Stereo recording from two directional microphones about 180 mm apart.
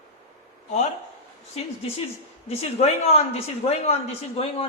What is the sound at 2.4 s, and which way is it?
A man's voice, 35° left (ahead or behind).